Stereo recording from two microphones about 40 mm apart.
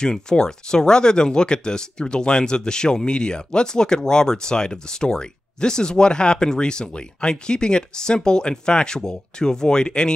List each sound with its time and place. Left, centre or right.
0.0 s speech: centre